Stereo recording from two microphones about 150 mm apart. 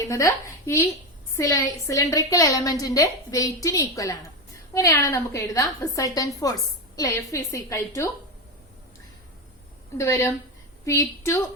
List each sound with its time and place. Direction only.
0.0 s a woman's voice: 20° left (ahead or behind)
10.0 s a woman's voice: 20° left (ahead or behind)